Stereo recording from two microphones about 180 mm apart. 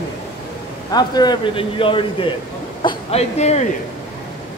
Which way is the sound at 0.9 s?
20° left (ahead or behind).